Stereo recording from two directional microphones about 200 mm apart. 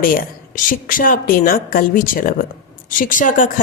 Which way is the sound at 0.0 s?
45° left (ahead or behind).